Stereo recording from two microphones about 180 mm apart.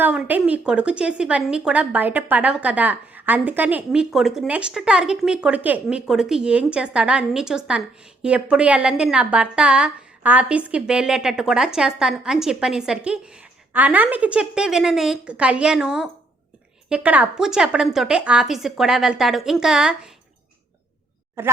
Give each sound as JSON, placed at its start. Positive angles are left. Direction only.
{"t": 0.0, "sound": "a woman's voice", "side_deg": -10}
{"t": 21.4, "sound": "a woman's voice", "side_deg": -15}